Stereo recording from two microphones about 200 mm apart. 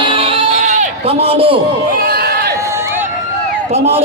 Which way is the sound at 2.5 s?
15° right (ahead or behind).